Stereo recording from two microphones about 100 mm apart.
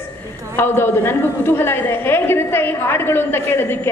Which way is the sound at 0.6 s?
20° left (ahead or behind).